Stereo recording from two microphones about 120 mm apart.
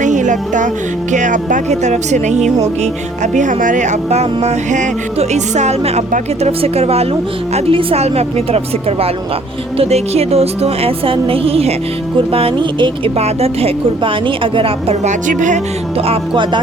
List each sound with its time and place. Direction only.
0.0 s music: 90° right
1.1 s speech: 90° right; by 2.9 s 70° right (ahead or behind)
3.3 s a woman's voice: 90° right; by 12.9 s 45° right (ahead or behind)
13.1 s a woman's voice: 60° right (ahead or behind)
15.0 s speech: 90° right
16.0 s a woman's voice: 50° right (ahead or behind)